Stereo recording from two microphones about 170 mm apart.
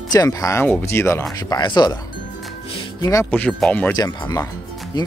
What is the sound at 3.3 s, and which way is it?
Speech, 5° left (ahead or behind).